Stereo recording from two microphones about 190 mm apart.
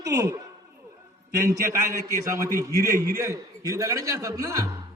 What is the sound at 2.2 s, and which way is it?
A man's voice, 15° right (ahead or behind).